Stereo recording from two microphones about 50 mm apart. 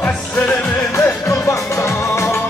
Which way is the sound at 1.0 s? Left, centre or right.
Left.